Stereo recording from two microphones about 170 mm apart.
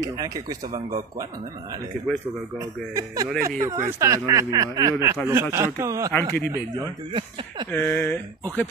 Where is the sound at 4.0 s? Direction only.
20° right (ahead or behind).